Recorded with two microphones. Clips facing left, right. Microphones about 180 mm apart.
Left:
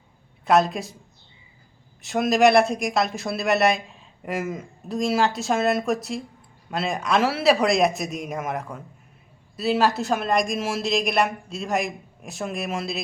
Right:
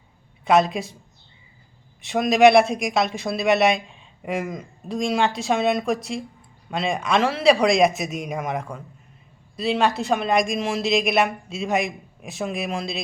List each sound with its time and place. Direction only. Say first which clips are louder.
0.4 s speech: right 1 dB; centre (ahead or behind)
2.0 s speech: right 2 dB; centre (ahead or behind)